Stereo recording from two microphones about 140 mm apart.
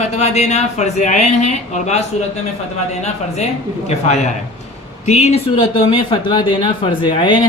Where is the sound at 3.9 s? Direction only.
55° left (ahead or behind); by 7.5 s 35° left (ahead or behind).